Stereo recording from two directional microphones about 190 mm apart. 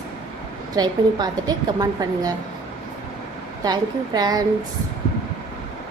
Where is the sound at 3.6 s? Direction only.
20° right (ahead or behind).